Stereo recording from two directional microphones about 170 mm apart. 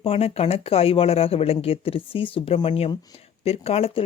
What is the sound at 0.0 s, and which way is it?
Speech, 35° left (ahead or behind).